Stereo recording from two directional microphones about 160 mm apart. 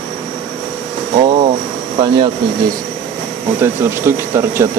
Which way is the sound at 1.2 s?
30° right (ahead or behind).